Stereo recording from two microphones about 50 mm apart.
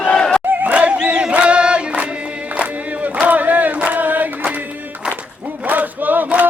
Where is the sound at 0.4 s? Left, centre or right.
Right.